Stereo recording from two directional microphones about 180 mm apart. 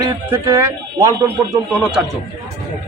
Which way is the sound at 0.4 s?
15° right (ahead or behind).